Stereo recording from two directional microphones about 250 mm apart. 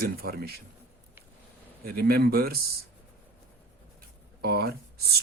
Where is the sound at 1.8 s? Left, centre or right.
Right.